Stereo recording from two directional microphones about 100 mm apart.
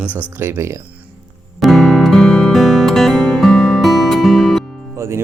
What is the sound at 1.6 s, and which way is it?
Music, centre (ahead or behind).